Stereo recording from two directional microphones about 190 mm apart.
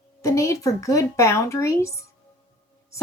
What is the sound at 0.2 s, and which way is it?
A woman's voice, 15° left (ahead or behind).